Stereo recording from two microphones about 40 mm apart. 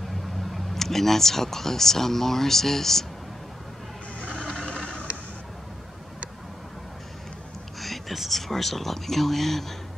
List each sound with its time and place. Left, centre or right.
0.5 s speech: centre
4.4 s a sound: centre
7.8 s whispering: centre
8.3 s speech: centre